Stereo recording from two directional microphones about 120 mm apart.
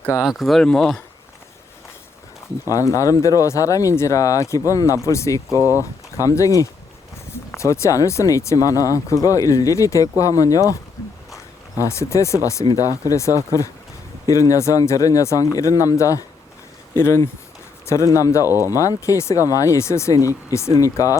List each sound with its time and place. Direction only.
0.2 s speech: 5° right (ahead or behind)
2.6 s speech: 25° left (ahead or behind)
11.8 s speech: 25° left (ahead or behind)
18.4 s speech: 20° right (ahead or behind)
18.7 s speech: 30° left (ahead or behind)